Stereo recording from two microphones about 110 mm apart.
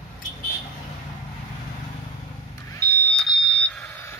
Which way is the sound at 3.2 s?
5° left (ahead or behind).